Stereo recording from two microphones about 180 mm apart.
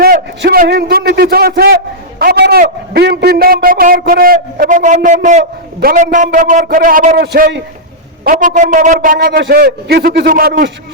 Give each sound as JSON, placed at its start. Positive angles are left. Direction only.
{"t": 0.0, "sound": "a sound", "side_deg": -60}
{"t": 5.8, "sound": "a man's voice", "side_deg": -50}
{"t": 9.1, "sound": "a man's voice", "side_deg": -65}